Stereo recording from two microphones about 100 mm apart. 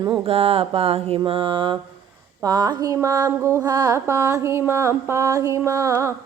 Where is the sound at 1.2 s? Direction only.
60° right (ahead or behind).